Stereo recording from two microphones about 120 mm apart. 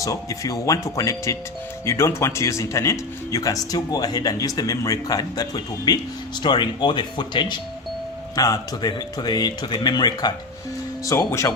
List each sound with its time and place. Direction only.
0.0 s speech: 30° left (ahead or behind)